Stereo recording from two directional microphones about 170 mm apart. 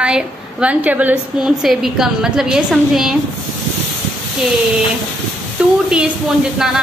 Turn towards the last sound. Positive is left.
turn(degrees=0)  # may be behind; listen again after turning